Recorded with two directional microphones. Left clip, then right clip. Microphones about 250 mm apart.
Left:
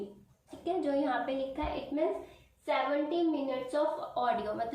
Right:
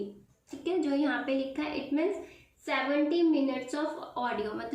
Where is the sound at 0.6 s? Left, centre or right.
Centre.